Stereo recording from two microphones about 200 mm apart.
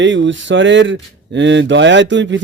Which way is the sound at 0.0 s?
65° right (ahead or behind).